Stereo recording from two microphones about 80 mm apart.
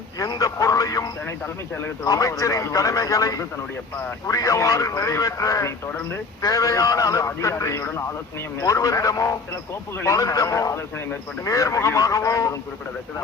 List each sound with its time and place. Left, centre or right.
0.3 s a man's voice: left